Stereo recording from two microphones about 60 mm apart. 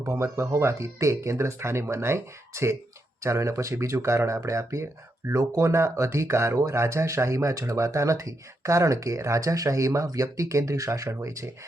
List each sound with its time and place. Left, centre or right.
0.0 s speech: right